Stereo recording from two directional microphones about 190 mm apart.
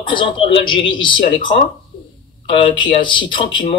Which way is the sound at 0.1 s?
25° left (ahead or behind).